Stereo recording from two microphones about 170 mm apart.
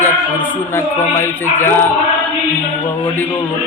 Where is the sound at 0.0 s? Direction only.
15° left (ahead or behind).